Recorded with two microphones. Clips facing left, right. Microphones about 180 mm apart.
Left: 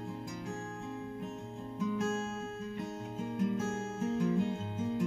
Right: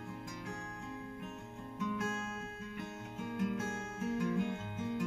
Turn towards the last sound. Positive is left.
turn(degrees=30)  # may be behind; listen again after turning